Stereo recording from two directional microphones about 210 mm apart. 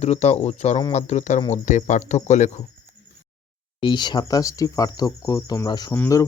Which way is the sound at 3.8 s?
20° left (ahead or behind).